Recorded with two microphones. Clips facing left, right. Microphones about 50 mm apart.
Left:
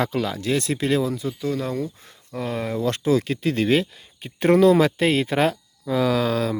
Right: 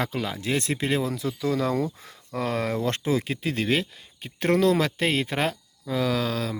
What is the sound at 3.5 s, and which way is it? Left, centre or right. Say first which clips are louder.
Speech: left 5 dB; centre.